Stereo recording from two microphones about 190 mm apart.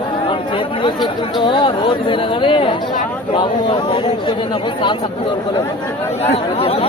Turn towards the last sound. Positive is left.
turn(degrees=30)  # may be behind; listen again after turning